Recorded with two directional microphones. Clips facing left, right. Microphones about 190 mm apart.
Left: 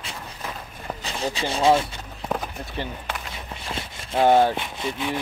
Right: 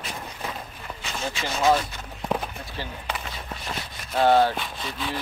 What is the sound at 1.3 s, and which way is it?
Speech, 30° left (ahead or behind).